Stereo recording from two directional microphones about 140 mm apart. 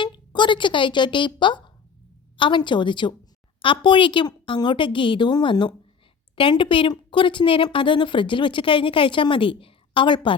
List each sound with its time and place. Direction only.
0.0 s a woman's voice: 35° left (ahead or behind)